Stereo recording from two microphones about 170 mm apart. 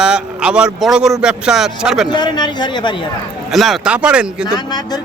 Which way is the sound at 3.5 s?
Centre (ahead or behind).